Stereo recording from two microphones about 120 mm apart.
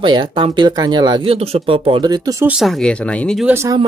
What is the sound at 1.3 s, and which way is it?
Speech, 55° right (ahead or behind).